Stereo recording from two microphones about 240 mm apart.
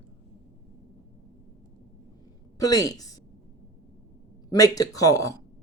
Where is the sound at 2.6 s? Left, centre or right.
Centre.